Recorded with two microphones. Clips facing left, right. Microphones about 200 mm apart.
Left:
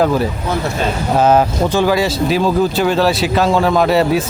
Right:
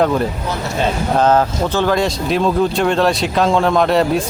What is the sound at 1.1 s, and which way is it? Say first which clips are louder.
Speech: left 2 dB; 10° left (ahead or behind).